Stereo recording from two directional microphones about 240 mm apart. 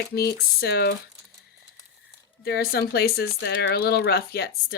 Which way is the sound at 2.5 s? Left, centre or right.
Left.